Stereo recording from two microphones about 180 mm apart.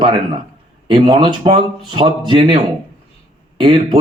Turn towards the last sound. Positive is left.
turn(degrees=-25)  # may be behind; listen again after turning